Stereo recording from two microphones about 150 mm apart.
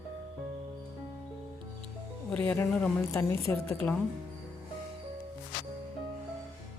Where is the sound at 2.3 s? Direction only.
10° left (ahead or behind).